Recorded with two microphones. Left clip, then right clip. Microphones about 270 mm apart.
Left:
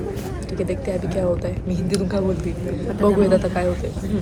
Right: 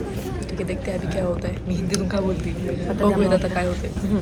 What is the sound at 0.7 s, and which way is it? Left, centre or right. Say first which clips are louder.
Speech: left 2 dB; centre.